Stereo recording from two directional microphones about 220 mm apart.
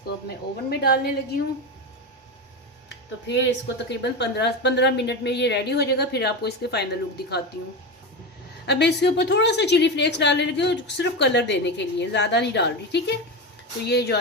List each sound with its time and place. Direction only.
0.7 s a woman's voice: 45° left (ahead or behind)
3.2 s a woman's voice: 50° left (ahead or behind)
8.6 s a woman's voice: 50° left (ahead or behind)